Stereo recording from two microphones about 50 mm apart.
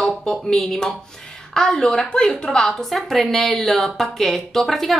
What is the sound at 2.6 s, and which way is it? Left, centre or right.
Speech, centre.